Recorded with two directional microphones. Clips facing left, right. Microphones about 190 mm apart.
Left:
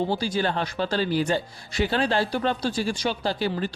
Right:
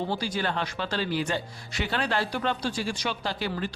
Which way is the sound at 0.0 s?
30° left (ahead or behind).